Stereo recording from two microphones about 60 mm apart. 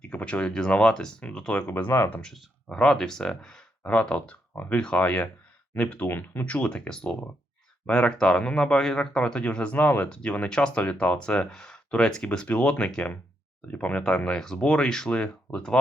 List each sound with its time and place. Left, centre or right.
0.0 s speech: left
1.6 s speech: left
2.2 s speech: centre
4.5 s speech: left
4.8 s speech: centre; by 6.4 s left
6.4 s speech: left
14.0 s speech: centre